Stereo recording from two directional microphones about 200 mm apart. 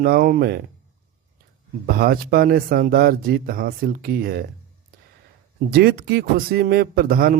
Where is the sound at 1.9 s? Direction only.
50° right (ahead or behind).